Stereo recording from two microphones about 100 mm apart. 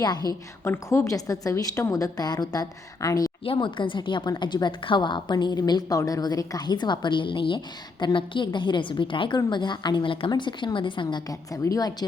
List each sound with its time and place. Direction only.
0.0 s a woman's voice: 45° left (ahead or behind)
0.6 s a woman's voice: 25° left (ahead or behind)
3.4 s a woman's voice: 60° left (ahead or behind)
11.3 s a woman's voice: 35° left (ahead or behind)